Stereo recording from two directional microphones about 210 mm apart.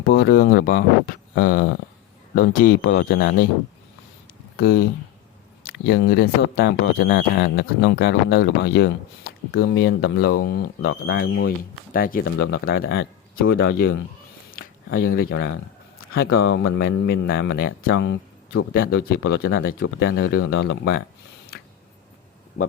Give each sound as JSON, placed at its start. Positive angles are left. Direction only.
{"t": 0.0, "sound": "speech", "side_deg": 50}
{"t": 4.5, "sound": "speech", "side_deg": 50}
{"t": 14.5, "sound": "a sound", "side_deg": 45}
{"t": 16.0, "sound": "speech", "side_deg": 45}
{"t": 16.6, "sound": "speech", "side_deg": 60}
{"t": 17.2, "sound": "speech", "side_deg": 45}